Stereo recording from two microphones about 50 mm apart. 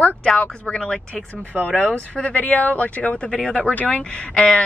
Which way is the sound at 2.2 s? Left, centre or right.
Left.